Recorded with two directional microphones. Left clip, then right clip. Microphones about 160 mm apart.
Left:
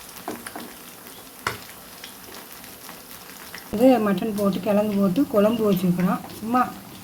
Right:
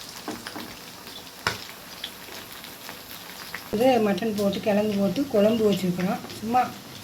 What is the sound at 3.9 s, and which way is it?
Speech, 55° left (ahead or behind).